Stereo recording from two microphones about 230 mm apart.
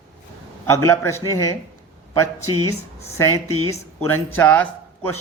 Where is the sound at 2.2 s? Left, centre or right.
Left.